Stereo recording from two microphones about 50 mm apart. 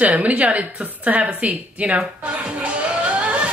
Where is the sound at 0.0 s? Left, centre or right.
Right.